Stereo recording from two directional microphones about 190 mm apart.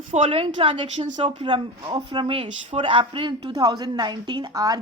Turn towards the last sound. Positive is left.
turn(degrees=-20)  # may be behind; listen again after turning